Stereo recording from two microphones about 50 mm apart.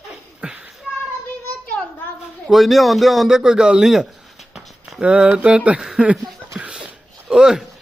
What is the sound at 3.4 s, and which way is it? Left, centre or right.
Speech, centre.